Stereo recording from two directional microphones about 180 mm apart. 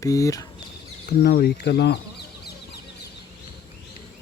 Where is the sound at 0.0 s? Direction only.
20° left (ahead or behind).